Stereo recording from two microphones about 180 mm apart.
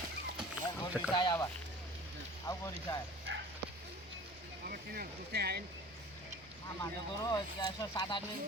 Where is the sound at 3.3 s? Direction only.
85° right.